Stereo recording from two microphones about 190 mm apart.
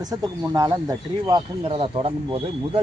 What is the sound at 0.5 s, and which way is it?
Speech, 20° right (ahead or behind).